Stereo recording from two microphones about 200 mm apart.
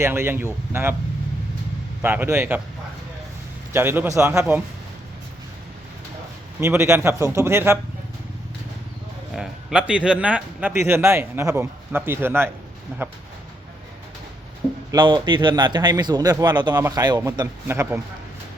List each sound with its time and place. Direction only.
0.0 s a man's voice: 10° right (ahead or behind)
2.0 s a man's voice: 10° right (ahead or behind)
3.7 s a man's voice: 10° right (ahead or behind)
6.6 s a man's voice: 15° right (ahead or behind)
9.3 s a man's voice: centre (ahead or behind)
14.9 s speech: 20° right (ahead or behind)